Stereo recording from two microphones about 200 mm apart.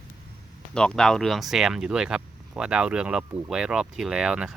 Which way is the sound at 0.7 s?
5° left (ahead or behind).